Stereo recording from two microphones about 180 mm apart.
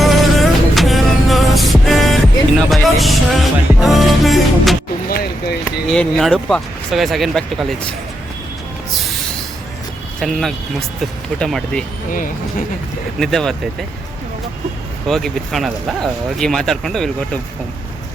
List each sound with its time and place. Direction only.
0.0 s music: centre (ahead or behind)
5.0 s a sound: 60° left (ahead or behind)
5.9 s speech: 5° left (ahead or behind)
10.2 s speech: centre (ahead or behind)
13.1 s speech: centre (ahead or behind)
15.0 s speech: centre (ahead or behind)